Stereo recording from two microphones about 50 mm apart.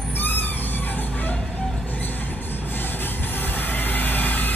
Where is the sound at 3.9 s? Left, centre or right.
Left.